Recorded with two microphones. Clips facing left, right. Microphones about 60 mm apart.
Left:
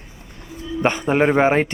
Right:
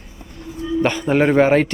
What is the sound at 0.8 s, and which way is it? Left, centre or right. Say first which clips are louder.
Speech: left 1 dB; left.